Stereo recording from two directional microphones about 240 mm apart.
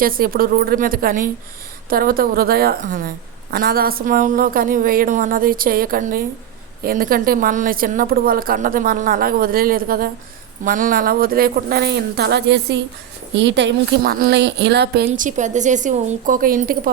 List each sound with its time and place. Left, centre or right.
0.0 s a woman's voice: right